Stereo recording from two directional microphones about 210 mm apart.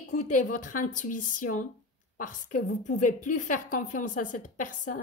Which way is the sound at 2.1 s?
40° left (ahead or behind).